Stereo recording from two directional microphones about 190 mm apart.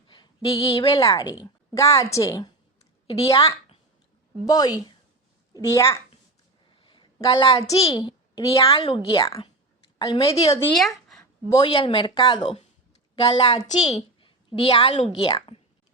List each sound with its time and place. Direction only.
0.1 s a woman's voice: 25° left (ahead or behind)
3.1 s a woman's voice: 30° left (ahead or behind)
4.4 s a child's voice: 20° left (ahead or behind)
6.8 s a sound: 25° left (ahead or behind)
7.8 s a child's voice: 25° left (ahead or behind)
10.8 s a sound: centre (ahead or behind)
11.4 s a child's voice: 20° left (ahead or behind)
12.4 s a woman's voice: 30° left (ahead or behind)